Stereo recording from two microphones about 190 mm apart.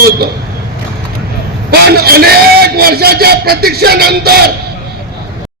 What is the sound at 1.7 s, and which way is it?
A man's voice, 55° right (ahead or behind).